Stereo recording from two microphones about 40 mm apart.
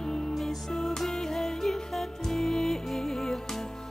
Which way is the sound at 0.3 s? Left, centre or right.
Centre.